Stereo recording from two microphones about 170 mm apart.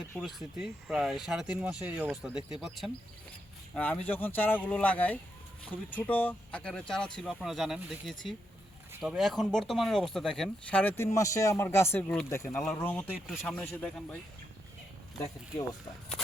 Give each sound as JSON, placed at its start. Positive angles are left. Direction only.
{"t": 0.2, "sound": "speech", "side_deg": 0}
{"t": 13.1, "sound": "speech", "side_deg": -5}